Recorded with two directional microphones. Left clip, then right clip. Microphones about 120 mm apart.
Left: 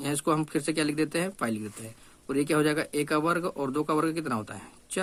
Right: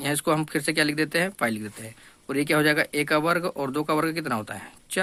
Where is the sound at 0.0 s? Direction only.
25° right (ahead or behind).